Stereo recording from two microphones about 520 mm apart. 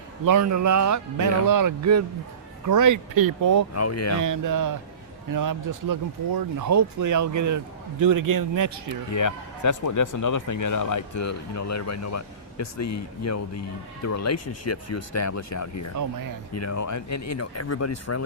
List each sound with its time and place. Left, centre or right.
0.3 s speech: right
3.8 s speech: left
4.2 s speech: right
9.1 s speech: left